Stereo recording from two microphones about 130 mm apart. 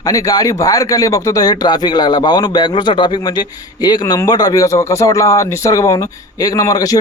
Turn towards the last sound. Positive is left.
turn(degrees=30)  # may be behind; listen again after turning